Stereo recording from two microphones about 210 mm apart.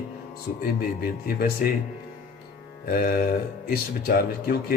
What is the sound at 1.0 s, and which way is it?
Speech, 45° left (ahead or behind).